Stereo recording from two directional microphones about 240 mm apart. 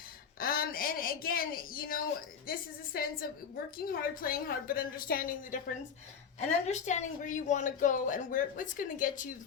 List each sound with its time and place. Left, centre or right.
0.3 s a sound: left
2.5 s speech: left
6.7 s speech: left